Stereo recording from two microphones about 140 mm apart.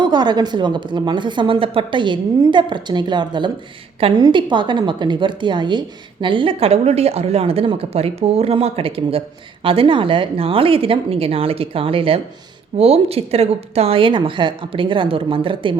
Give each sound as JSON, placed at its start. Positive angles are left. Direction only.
{"t": 0.0, "sound": "a woman's voice", "side_deg": -30}